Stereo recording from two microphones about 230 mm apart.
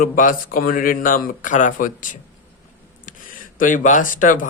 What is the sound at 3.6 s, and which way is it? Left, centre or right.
Speech, left.